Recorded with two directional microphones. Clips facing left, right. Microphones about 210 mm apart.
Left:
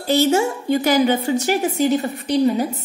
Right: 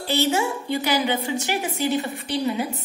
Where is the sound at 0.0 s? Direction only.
45° left (ahead or behind).